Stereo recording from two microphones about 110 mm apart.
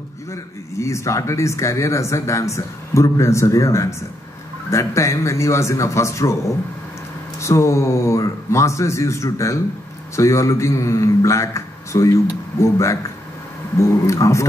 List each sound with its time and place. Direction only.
0.3 s speech: 25° left (ahead or behind)
7.3 s speech: 25° left (ahead or behind)